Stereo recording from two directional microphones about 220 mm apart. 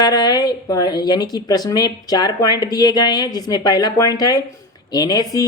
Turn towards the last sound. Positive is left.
turn(degrees=15)  # may be behind; listen again after turning